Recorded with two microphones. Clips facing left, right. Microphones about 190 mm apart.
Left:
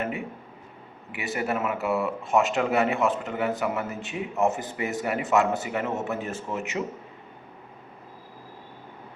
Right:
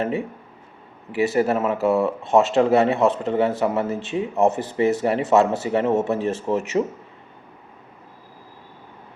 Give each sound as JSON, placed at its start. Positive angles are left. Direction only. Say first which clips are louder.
{"t": 1.1, "sound": "speech", "louder": "right 9 dB", "side_deg": -30}